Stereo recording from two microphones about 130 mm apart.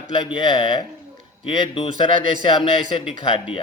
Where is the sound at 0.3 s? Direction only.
35° left (ahead or behind).